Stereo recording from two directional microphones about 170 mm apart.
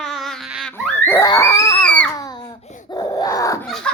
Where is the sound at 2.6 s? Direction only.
40° left (ahead or behind).